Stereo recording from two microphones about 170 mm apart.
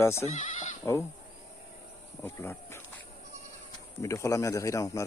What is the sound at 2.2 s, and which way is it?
Speech, 15° left (ahead or behind).